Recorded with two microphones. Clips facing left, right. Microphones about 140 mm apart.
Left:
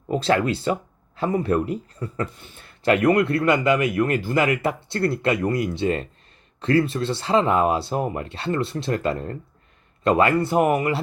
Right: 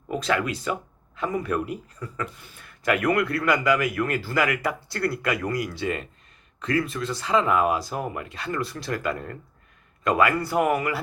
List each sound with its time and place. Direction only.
0.1 s speech: 30° left (ahead or behind)